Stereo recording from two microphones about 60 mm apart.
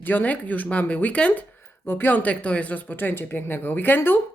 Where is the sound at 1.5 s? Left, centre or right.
Left.